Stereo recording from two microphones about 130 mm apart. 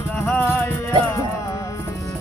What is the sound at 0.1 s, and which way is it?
Music, 15° left (ahead or behind).